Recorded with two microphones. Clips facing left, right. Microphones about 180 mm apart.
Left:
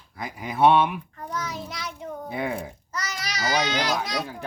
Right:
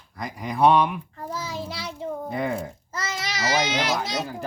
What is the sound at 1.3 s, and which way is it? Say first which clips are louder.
Child singing: right 1 dB; 30° right (ahead or behind).